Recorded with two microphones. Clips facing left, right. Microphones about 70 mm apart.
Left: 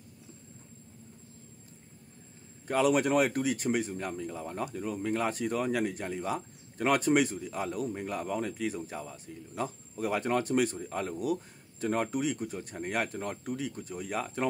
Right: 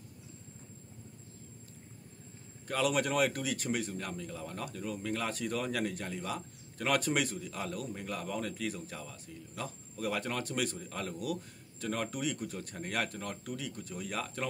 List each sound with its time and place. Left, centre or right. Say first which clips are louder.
2.7 s speech: left 5 dB; left